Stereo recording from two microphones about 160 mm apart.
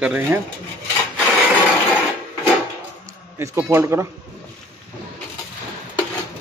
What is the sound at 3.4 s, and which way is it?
Speech, 15° right (ahead or behind).